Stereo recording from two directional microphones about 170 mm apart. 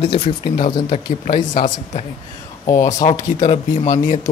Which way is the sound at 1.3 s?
50° left (ahead or behind).